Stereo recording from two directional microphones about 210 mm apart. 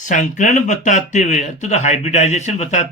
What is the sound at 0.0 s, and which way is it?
Speech, 35° left (ahead or behind).